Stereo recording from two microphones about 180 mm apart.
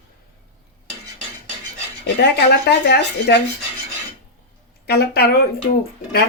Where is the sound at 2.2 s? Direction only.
70° left (ahead or behind).